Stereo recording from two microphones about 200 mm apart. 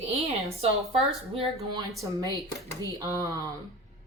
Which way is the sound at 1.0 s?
30° right (ahead or behind).